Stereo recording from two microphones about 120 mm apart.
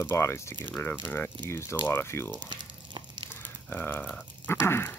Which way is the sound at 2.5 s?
40° right (ahead or behind).